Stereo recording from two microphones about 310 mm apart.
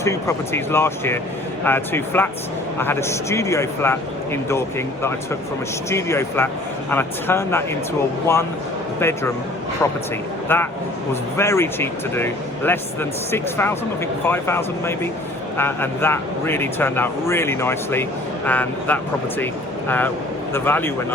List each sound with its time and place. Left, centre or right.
0.0 s speech: centre
5.9 s speech: centre
10.5 s speech: centre
20.5 s speech: centre